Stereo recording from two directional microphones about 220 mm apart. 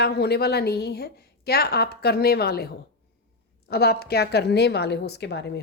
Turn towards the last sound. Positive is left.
turn(degrees=50)  # may be behind; listen again after turning